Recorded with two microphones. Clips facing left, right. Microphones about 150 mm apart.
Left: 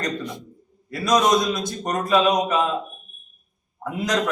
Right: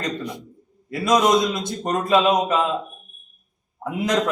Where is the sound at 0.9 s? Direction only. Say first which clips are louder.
Right 1 dB; 25° right (ahead or behind).